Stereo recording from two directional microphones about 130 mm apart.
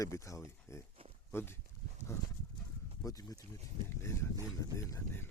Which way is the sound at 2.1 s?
20° left (ahead or behind).